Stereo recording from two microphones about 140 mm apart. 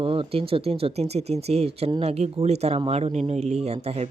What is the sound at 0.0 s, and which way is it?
Speech, 40° right (ahead or behind).